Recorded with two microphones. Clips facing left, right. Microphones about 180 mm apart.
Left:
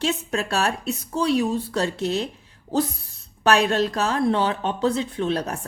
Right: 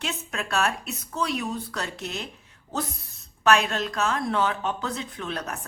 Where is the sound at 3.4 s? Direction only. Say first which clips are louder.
Left 3 dB; 35° left (ahead or behind).